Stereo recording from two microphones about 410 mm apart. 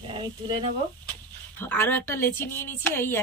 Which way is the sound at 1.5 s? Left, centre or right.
Centre.